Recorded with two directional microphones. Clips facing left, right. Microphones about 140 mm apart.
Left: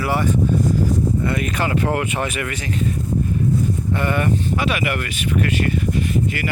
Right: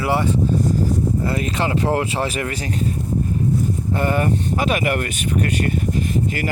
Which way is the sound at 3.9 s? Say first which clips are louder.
Right 1 dB; 40° right (ahead or behind).